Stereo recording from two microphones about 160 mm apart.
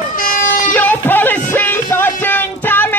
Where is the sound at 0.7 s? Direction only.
10° left (ahead or behind).